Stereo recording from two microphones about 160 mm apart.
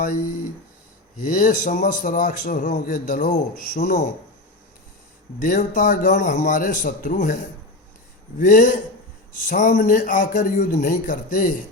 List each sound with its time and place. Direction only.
1.2 s a man's voice: 55° left (ahead or behind)
5.4 s a man's voice: 55° left (ahead or behind)
8.4 s a man's voice: 55° left (ahead or behind)